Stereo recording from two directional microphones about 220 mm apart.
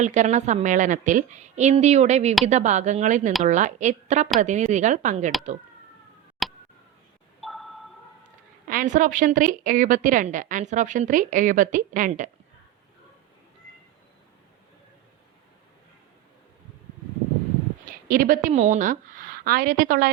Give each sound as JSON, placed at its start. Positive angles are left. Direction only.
{"t": 0.0, "sound": "a woman's voice", "side_deg": -35}
{"t": 6.4, "sound": "a sound", "side_deg": 0}
{"t": 7.4, "sound": "sonar", "side_deg": 0}
{"t": 8.6, "sound": "a woman's voice", "side_deg": -35}
{"t": 17.8, "sound": "a woman's voice", "side_deg": -40}